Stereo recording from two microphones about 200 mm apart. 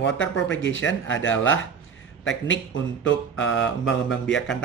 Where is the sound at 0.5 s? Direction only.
70° left (ahead or behind).